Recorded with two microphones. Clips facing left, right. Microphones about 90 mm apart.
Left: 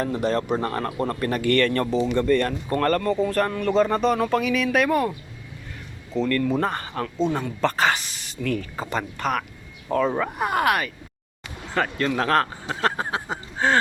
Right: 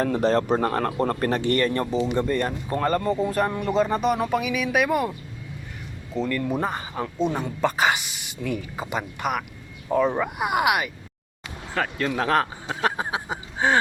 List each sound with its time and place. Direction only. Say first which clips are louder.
0.0 s speech: right 2 dB; 40° right (ahead or behind)
1.4 s speech: left 2 dB; 20° right (ahead or behind)
6.1 s speech: left 3 dB; 10° right (ahead or behind)